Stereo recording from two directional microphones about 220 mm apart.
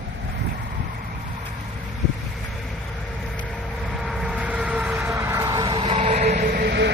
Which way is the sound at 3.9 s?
Centre (ahead or behind).